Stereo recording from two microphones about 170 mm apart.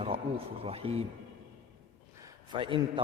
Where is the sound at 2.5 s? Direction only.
30° right (ahead or behind).